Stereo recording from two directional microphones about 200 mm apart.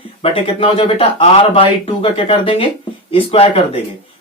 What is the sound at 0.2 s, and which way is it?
Speech, 30° left (ahead or behind).